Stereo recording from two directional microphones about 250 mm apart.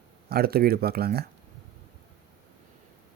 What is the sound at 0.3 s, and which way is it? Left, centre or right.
Speech, right.